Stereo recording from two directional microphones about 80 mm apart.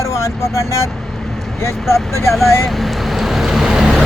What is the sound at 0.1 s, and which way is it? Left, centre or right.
Speech, left.